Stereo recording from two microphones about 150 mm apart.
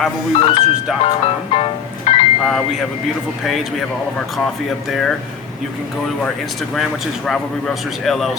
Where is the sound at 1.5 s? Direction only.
40° left (ahead or behind).